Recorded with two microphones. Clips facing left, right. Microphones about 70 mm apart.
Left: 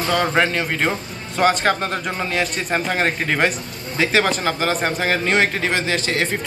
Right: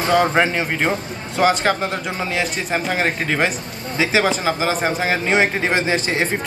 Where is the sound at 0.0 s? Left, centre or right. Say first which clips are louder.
Right 2 dB; right.